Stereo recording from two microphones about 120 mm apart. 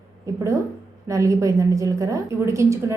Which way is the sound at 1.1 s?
25° right (ahead or behind).